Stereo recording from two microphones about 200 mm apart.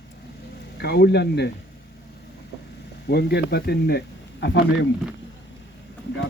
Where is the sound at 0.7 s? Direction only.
55° left (ahead or behind).